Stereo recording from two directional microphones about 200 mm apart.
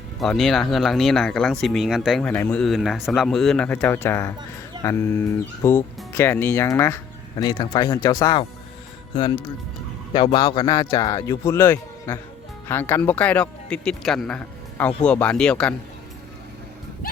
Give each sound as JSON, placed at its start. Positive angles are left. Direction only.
{"t": 0.2, "sound": "speech", "side_deg": 0}